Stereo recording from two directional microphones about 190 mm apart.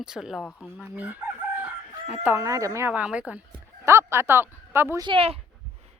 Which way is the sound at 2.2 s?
15° right (ahead or behind).